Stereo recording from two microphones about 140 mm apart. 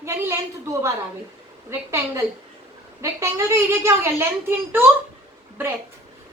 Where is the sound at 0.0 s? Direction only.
20° right (ahead or behind).